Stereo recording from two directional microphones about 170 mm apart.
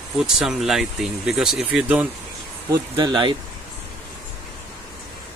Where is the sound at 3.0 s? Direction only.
25° right (ahead or behind).